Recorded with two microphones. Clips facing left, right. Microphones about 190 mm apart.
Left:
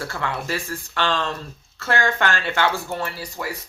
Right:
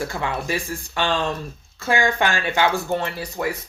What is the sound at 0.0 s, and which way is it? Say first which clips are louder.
Speech: right 2 dB; 15° right (ahead or behind).